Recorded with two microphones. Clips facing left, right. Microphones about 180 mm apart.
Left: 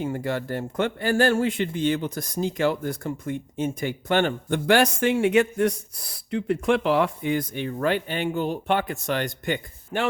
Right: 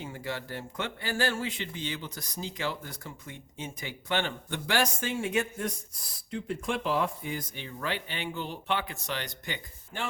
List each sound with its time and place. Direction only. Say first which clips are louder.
0.0 s speech: left 10 dB; 50° left (ahead or behind)
9.9 s a man's voice: left 10 dB; 70° left (ahead or behind)